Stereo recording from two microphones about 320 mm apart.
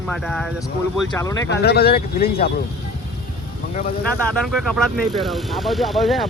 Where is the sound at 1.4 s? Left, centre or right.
Left.